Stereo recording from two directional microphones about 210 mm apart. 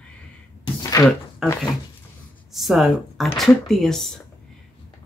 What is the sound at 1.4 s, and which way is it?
Speech, centre (ahead or behind).